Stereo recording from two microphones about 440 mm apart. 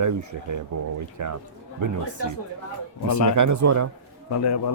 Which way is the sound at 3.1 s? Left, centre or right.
Right.